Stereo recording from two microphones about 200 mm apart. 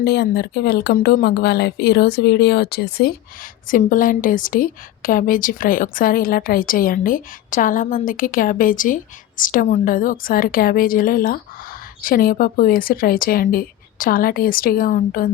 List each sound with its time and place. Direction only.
0.0 s a woman's voice: 55° left (ahead or behind)